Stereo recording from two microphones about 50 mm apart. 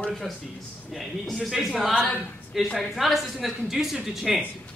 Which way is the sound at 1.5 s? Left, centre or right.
Centre.